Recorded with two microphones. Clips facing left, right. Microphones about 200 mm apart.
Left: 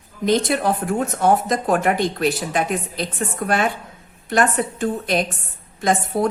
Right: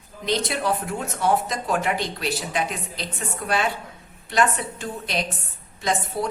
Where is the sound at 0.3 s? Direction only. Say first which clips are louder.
Left 5 dB; 50° left (ahead or behind).